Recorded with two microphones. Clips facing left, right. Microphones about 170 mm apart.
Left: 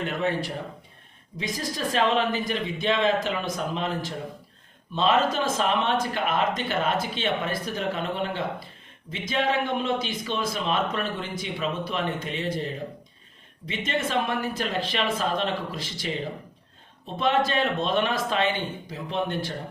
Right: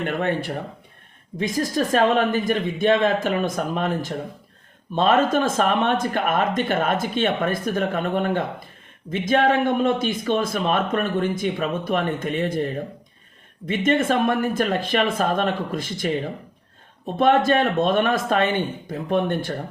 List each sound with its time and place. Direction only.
0.0 s speech: 55° right (ahead or behind)
13.7 s speech: 50° right (ahead or behind)
17.2 s speech: 50° right (ahead or behind)